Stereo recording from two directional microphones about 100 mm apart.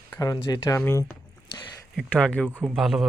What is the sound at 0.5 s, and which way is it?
Speech, 30° left (ahead or behind).